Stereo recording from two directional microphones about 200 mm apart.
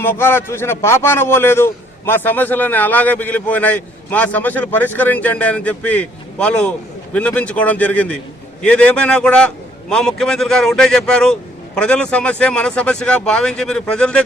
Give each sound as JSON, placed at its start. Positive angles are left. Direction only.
{"t": 0.0, "sound": "a man's voice", "side_deg": 10}